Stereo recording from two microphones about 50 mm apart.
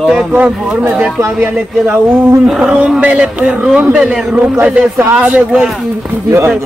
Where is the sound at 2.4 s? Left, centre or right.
Centre.